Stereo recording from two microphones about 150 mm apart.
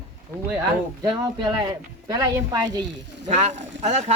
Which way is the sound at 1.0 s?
30° right (ahead or behind).